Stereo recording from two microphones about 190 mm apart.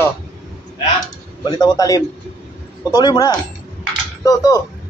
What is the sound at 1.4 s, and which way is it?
A man's voice, 20° left (ahead or behind).